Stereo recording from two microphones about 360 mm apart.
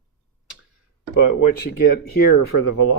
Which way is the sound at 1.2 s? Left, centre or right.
Left.